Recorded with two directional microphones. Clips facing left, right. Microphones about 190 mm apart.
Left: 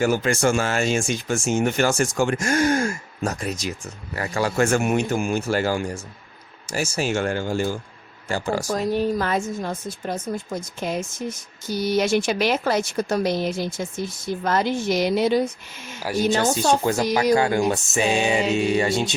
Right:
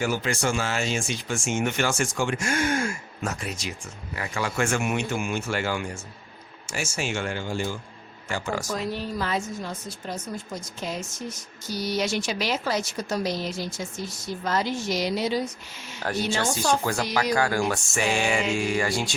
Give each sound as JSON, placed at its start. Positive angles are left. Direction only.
{"t": 0.0, "sound": "speech", "side_deg": 45}
{"t": 8.7, "sound": "speech", "side_deg": 50}
{"t": 16.0, "sound": "a woman's voice", "side_deg": 5}
{"t": 16.4, "sound": "speech", "side_deg": 25}